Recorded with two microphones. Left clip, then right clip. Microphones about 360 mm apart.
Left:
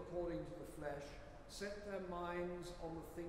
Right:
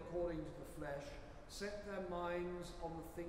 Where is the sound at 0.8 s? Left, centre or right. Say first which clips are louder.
Right 1 dB; right.